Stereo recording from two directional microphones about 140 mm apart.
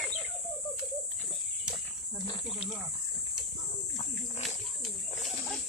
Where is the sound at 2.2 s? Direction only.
35° left (ahead or behind).